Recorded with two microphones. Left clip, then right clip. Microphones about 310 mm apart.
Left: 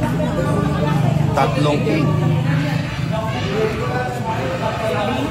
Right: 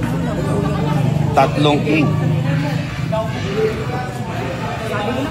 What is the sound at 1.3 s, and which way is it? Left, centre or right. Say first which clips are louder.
Speech: right 4 dB; right.